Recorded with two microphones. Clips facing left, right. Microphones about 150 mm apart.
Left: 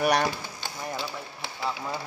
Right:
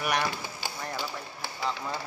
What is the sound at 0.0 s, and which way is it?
Speech, 35° left (ahead or behind).